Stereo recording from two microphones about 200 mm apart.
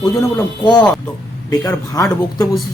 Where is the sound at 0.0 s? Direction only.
15° left (ahead or behind).